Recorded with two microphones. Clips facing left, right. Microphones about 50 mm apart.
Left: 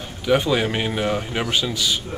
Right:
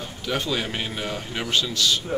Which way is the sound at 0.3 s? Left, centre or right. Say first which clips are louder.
Left 8 dB; centre.